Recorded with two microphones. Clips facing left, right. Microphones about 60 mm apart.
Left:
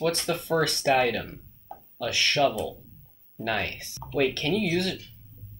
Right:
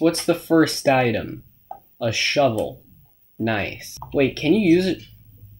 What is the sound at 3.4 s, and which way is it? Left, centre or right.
Speech, right.